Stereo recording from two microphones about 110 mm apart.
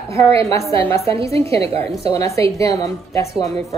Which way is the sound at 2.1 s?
30° left (ahead or behind).